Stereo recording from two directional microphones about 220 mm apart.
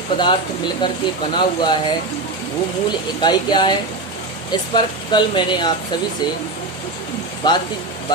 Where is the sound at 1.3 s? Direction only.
20° left (ahead or behind).